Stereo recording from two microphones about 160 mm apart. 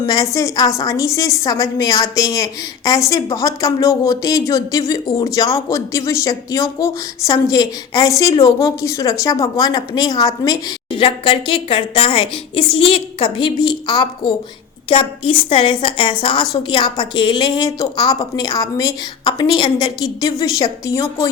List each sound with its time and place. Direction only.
0.0 s a woman's voice: 20° left (ahead or behind)